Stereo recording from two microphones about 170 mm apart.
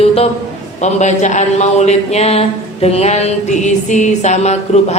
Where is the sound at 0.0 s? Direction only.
35° left (ahead or behind).